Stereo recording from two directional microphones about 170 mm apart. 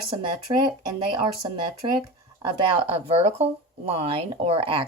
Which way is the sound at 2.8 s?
35° right (ahead or behind).